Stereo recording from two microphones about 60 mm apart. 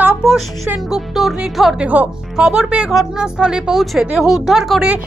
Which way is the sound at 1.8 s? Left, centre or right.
Right.